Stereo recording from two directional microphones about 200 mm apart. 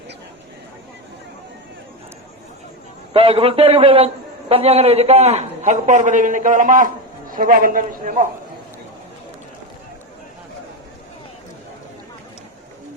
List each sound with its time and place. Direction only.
3.1 s a man's voice: 25° right (ahead or behind)